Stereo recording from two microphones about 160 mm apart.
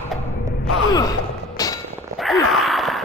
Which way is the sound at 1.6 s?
25° left (ahead or behind).